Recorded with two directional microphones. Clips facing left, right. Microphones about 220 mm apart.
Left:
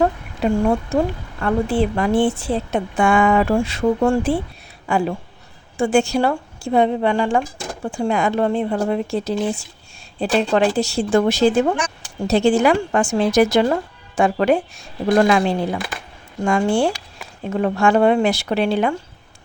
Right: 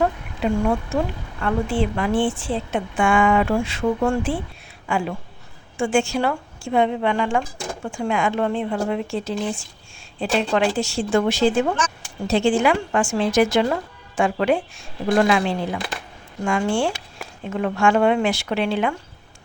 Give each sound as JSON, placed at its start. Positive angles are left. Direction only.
{"t": 0.9, "sound": "a woman's voice", "side_deg": 35}